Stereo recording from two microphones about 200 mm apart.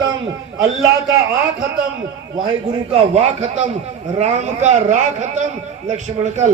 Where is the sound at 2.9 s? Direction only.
30° right (ahead or behind).